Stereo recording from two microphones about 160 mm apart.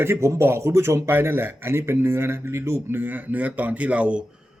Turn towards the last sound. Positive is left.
turn(degrees=-10)  # may be behind; listen again after turning